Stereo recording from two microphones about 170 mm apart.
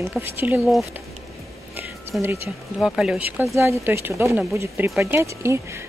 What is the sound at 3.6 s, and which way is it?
Speech, 15° right (ahead or behind).